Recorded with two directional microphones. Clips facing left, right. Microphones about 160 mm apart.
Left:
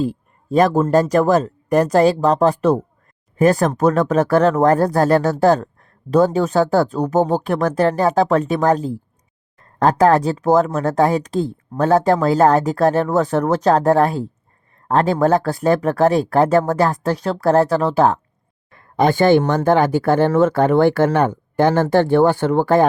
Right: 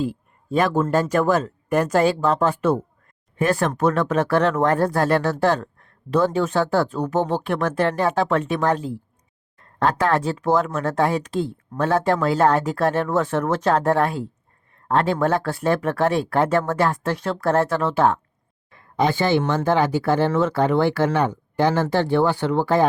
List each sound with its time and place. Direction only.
0.0 s speech: 40° left (ahead or behind)
18.7 s speech: 50° left (ahead or behind)